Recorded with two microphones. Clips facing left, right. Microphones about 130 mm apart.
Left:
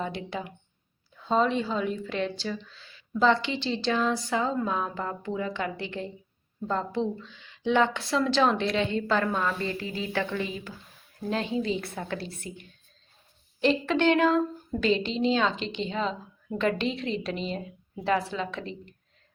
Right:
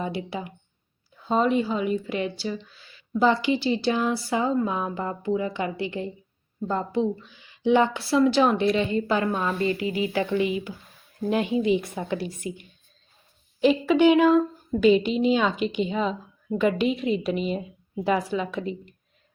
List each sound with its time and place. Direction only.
0.0 s speech: 5° right (ahead or behind)
9.6 s speech: 65° right (ahead or behind)
10.1 s speech: 10° right (ahead or behind)
13.6 s speech: 10° right (ahead or behind)